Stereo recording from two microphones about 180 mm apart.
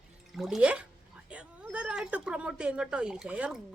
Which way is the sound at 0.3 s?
Centre (ahead or behind).